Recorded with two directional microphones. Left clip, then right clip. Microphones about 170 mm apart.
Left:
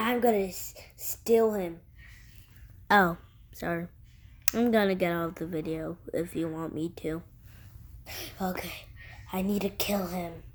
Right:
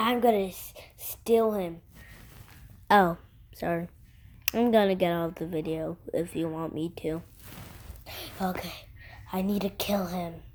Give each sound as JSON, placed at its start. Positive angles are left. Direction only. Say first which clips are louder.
{"t": 0.0, "sound": "a woman's voice", "louder": "right 2 dB", "side_deg": -25}
{"t": 2.8, "sound": "speech", "louder": "right 1 dB", "side_deg": -5}
{"t": 8.0, "sound": "a woman's voice", "louder": "right 2 dB", "side_deg": -35}